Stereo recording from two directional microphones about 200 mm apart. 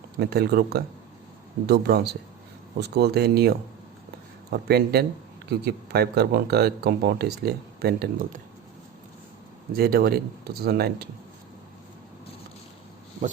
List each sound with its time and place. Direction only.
0.2 s speech: 50° right (ahead or behind)
4.5 s speech: 50° right (ahead or behind)
9.7 s speech: 50° right (ahead or behind)